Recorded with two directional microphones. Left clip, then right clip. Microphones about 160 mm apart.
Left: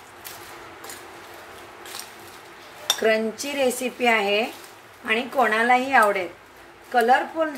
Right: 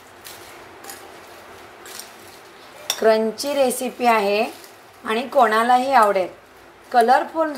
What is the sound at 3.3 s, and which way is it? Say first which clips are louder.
A woman's voice: right 4 dB; 10° right (ahead or behind).